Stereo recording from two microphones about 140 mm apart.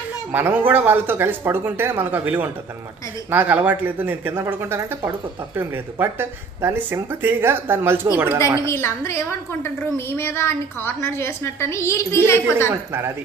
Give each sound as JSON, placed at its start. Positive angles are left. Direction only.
{"t": 0.3, "sound": "speech", "side_deg": -15}
{"t": 8.5, "sound": "a woman's voice", "side_deg": 20}